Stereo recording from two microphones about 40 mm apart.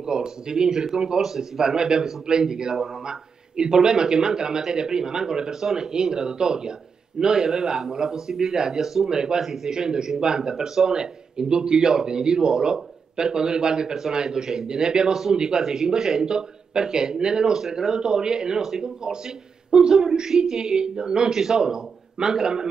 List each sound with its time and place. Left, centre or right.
0.0 s speech: centre
9.7 s speech: centre
15.3 s speech: right